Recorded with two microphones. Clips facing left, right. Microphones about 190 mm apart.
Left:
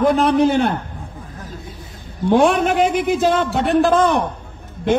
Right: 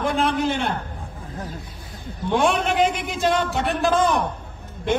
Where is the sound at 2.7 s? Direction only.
5° left (ahead or behind).